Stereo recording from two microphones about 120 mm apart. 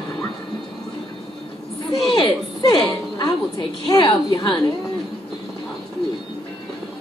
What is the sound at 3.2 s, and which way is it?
A woman's voice, 35° left (ahead or behind).